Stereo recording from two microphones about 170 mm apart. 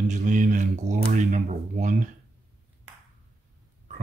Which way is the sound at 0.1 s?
50° right (ahead or behind).